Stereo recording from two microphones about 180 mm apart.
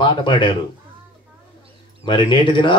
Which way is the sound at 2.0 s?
25° left (ahead or behind).